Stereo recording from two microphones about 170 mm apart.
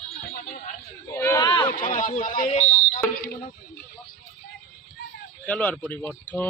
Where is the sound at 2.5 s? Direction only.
35° left (ahead or behind).